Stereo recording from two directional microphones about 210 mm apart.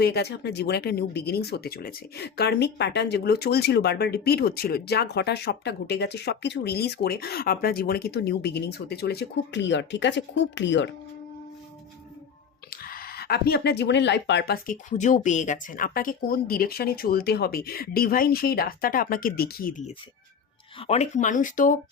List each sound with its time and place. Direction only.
0.0 s speech: 50° left (ahead or behind)
12.7 s speech: 45° left (ahead or behind)
20.7 s speech: 30° left (ahead or behind)